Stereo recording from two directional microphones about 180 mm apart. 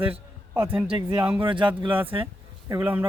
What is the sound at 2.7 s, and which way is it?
Speech, 10° right (ahead or behind).